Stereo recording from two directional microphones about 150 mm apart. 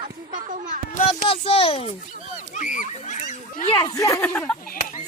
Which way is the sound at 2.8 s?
55° left (ahead or behind).